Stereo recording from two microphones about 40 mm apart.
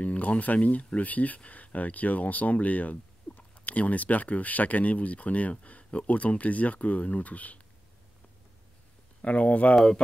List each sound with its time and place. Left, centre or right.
0.0 s speech: left
9.2 s speech: left